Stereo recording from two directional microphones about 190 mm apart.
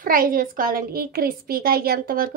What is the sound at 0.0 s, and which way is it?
A woman's voice, 50° right (ahead or behind).